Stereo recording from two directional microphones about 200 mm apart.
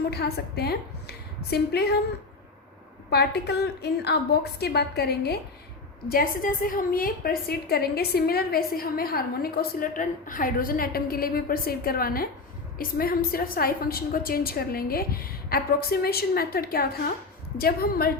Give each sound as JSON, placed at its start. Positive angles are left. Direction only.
{"t": 0.1, "sound": "a woman's voice", "side_deg": 50}
{"t": 3.1, "sound": "a woman's voice", "side_deg": 55}